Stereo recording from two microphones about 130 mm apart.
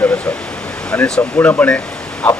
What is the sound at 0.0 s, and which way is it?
A man's voice, 10° left (ahead or behind).